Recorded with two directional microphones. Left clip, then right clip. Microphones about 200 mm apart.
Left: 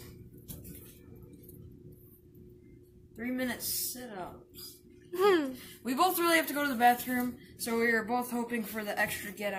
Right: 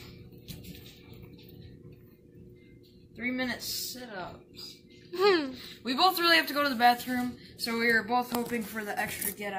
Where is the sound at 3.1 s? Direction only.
Centre (ahead or behind).